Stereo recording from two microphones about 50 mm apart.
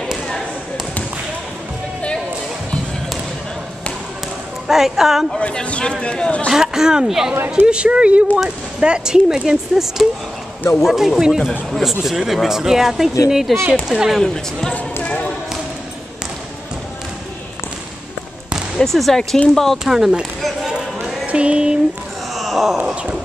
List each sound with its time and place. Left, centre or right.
4.6 s a woman's voice: centre
5.4 s a man's voice: left
6.5 s speech: centre
14.2 s speech: centre
15.0 s basketball bounce: left
18.8 s speech: centre
19.9 s speech: centre
20.6 s a sound: centre
21.3 s speech: right
22.3 s groan: centre